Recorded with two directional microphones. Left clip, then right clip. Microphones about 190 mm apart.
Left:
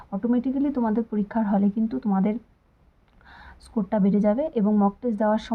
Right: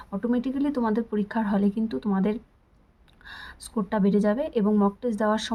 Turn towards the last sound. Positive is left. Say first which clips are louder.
# left 1 dB
turn(degrees=-15)  # may be behind; listen again after turning